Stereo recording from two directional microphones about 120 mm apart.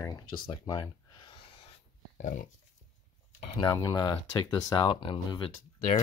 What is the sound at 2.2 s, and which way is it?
Dog, 90° left.